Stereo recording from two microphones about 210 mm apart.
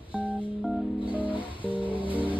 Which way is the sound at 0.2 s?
Centre (ahead or behind).